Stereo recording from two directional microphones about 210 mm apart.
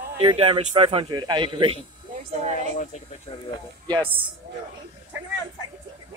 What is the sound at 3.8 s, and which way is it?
Speech, 25° right (ahead or behind).